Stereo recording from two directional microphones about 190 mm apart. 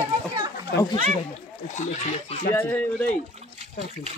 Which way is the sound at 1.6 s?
40° left (ahead or behind).